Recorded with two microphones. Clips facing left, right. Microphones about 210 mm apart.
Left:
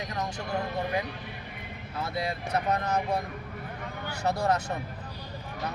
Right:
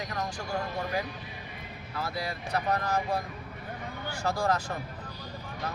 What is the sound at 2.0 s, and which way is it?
Speech, 25° left (ahead or behind).